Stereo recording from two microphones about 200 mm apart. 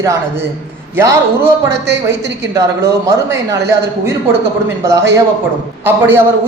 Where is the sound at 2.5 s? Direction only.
15° right (ahead or behind).